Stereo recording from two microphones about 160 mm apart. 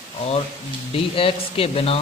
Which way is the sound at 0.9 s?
35° left (ahead or behind).